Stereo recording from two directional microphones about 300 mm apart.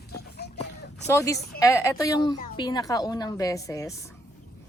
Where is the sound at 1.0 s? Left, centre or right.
Centre.